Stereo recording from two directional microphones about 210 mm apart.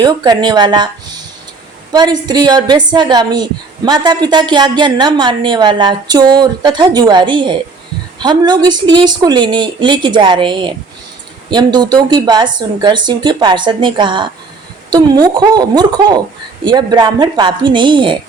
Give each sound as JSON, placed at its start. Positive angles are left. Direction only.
{"t": 0.0, "sound": "a woman's voice", "side_deg": -20}